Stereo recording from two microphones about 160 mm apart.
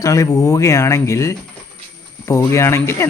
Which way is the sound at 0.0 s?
20° left (ahead or behind).